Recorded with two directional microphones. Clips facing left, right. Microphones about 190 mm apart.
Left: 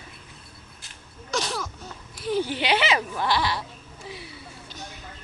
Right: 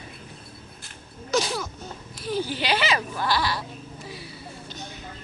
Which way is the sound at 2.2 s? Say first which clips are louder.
Left 2 dB; 20° left (ahead or behind).